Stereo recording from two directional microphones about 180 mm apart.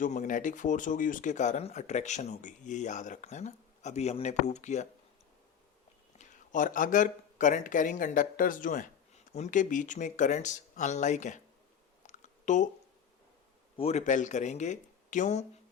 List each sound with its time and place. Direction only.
0.0 s speech: 45° left (ahead or behind)
6.1 s speech: 45° left (ahead or behind)
12.0 s a sound: 40° left (ahead or behind)
13.7 s speech: 35° left (ahead or behind)